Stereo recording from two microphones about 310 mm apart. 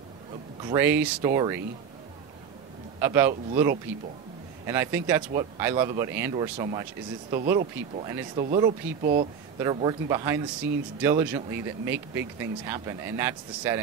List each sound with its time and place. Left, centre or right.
0.6 s speech: centre
3.0 s speech: centre
9.0 s speech: right
9.6 s speech: centre